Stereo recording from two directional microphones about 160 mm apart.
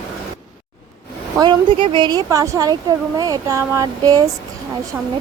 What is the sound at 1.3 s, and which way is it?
Speech, 25° right (ahead or behind).